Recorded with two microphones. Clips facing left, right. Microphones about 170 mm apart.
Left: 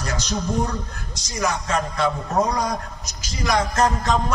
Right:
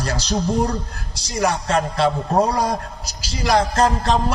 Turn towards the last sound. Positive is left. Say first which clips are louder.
# right 2 dB
turn(degrees=-30)  # may be behind; listen again after turning